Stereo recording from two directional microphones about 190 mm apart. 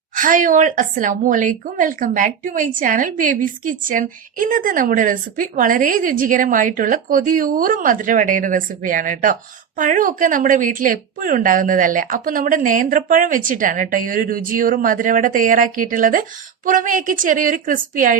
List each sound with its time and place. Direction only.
0.2 s a woman's voice: 45° right (ahead or behind)